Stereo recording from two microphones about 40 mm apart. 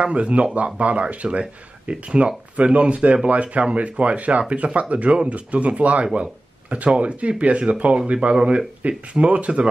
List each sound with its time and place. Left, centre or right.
0.0 s speech: right